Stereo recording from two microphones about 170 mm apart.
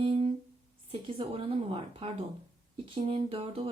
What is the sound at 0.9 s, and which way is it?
Speech, 35° right (ahead or behind).